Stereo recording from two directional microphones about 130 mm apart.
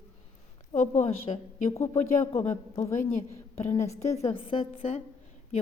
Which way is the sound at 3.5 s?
55° left (ahead or behind).